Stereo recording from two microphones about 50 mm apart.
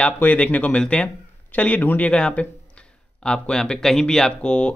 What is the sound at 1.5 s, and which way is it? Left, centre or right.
A man's voice, left.